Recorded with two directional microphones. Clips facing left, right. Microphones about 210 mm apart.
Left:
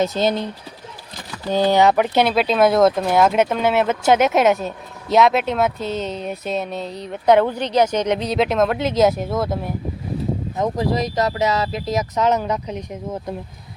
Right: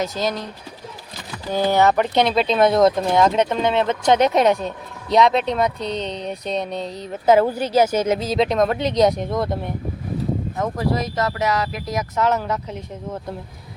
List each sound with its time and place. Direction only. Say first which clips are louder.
0.0 s speech: left 4 dB; 25° left (ahead or behind)
1.7 s speech: even; 15° left (ahead or behind)
10.6 s speech: left 3 dB; 20° left (ahead or behind)